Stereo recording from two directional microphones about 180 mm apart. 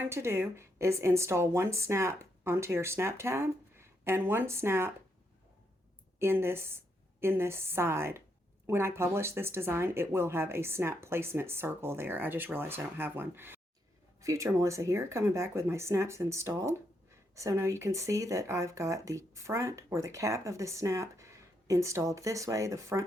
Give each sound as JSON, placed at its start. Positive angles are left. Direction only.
{"t": 0.0, "sound": "speech", "side_deg": -15}
{"t": 6.1, "sound": "a woman's voice", "side_deg": -15}